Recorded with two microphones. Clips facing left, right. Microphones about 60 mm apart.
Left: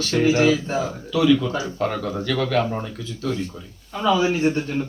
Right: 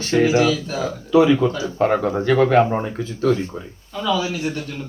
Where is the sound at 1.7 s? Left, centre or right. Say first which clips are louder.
Right 6 dB; right.